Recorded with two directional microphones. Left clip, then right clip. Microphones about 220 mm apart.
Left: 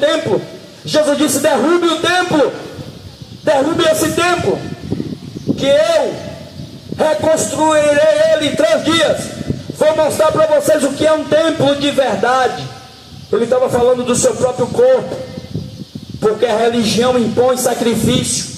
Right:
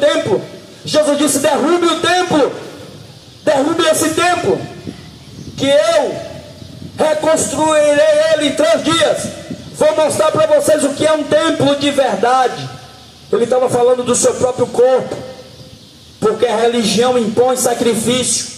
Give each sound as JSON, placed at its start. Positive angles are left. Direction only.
{"t": 0.8, "sound": "a man's voice", "side_deg": -50}
{"t": 3.4, "sound": "a man's voice", "side_deg": -50}
{"t": 5.6, "sound": "a man's voice", "side_deg": -50}
{"t": 16.2, "sound": "a man's voice", "side_deg": -50}